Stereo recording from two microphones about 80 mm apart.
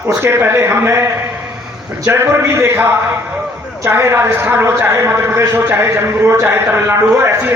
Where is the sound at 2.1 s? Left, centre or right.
Right.